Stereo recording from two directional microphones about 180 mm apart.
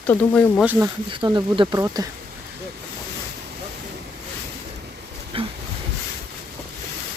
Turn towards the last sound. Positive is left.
turn(degrees=-30)  # may be behind; listen again after turning